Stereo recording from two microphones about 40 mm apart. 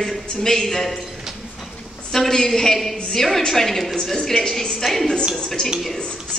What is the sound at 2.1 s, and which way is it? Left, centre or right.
A woman's voice, centre.